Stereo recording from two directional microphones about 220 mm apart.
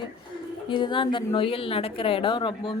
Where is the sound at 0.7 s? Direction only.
20° left (ahead or behind).